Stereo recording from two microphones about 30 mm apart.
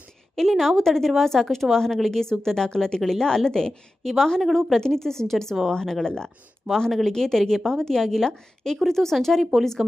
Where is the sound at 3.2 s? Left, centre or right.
Centre.